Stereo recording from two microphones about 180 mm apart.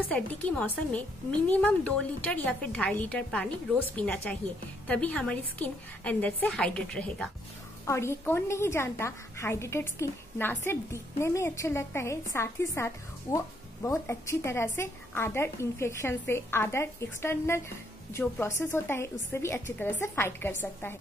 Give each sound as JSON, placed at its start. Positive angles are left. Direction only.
{"t": 0.1, "sound": "a woman's voice", "side_deg": 10}